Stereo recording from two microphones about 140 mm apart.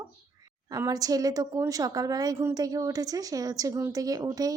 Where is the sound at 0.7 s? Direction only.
25° right (ahead or behind).